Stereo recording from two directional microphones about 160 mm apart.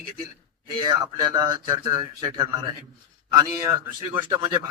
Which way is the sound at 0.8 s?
25° right (ahead or behind).